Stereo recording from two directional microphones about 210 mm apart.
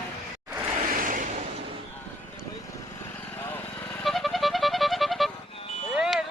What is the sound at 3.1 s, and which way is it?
Music, 10° left (ahead or behind).